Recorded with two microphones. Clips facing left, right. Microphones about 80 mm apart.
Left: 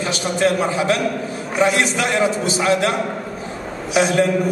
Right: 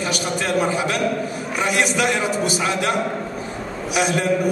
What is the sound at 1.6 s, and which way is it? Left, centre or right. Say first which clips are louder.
A man's voice: left 3 dB; left.